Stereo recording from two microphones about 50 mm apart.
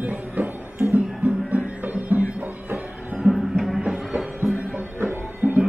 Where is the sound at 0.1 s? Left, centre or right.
Right.